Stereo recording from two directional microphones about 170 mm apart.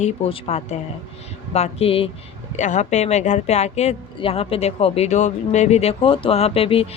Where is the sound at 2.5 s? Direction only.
45° left (ahead or behind).